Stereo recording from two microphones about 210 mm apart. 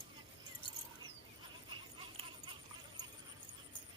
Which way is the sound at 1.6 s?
20° right (ahead or behind).